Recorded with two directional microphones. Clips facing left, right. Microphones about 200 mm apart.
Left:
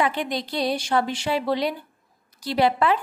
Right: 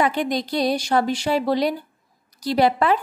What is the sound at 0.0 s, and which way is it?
A woman's voice, 40° right (ahead or behind).